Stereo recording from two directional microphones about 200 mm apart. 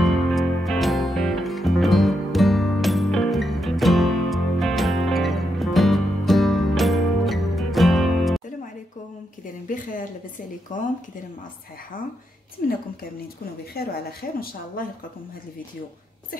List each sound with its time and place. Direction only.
0.0 s music: centre (ahead or behind)
9.7 s a sound: 40° left (ahead or behind)
10.7 s speech: 40° left (ahead or behind)
13.8 s speech: 50° left (ahead or behind)